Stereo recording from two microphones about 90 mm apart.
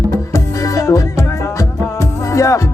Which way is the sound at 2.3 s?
35° left (ahead or behind).